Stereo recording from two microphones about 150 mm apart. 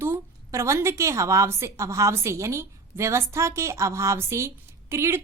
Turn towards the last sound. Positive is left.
turn(degrees=-15)  # may be behind; listen again after turning